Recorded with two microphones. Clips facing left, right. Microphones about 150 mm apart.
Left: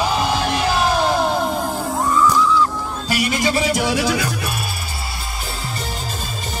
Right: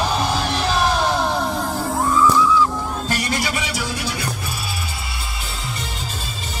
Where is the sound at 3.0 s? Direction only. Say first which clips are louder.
Left 6 dB; 10° left (ahead or behind).